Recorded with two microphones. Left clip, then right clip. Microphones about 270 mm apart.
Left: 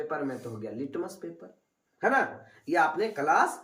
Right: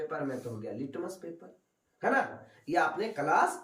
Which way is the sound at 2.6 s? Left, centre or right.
Centre.